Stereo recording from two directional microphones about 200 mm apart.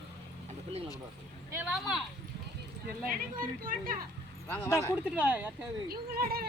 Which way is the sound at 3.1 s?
45° right (ahead or behind).